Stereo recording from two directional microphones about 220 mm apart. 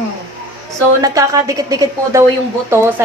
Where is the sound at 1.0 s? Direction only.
15° right (ahead or behind).